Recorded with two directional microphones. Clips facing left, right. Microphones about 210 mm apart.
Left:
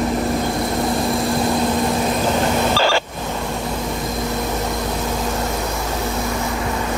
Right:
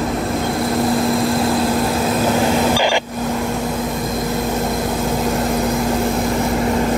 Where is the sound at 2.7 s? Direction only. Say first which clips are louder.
Right 1 dB; 15° right (ahead or behind).